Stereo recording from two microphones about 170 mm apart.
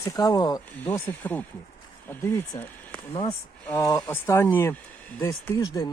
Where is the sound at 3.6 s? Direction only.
15° left (ahead or behind).